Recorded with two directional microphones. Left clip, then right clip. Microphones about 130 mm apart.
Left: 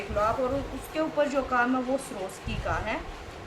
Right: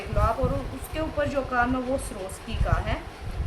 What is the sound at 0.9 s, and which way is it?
A woman's voice, 10° right (ahead or behind).